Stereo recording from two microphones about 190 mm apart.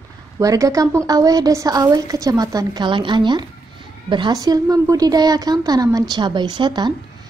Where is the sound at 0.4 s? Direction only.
15° right (ahead or behind).